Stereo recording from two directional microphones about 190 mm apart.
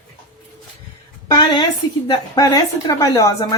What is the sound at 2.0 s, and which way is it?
A woman's voice, 20° left (ahead or behind).